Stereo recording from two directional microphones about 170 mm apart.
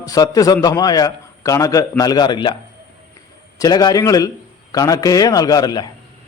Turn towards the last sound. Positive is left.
turn(degrees=25)  # may be behind; listen again after turning